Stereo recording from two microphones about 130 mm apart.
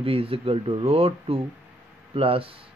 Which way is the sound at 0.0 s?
45° right (ahead or behind).